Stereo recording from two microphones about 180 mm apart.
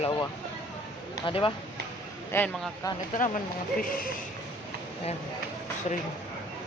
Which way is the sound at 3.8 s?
50° left (ahead or behind).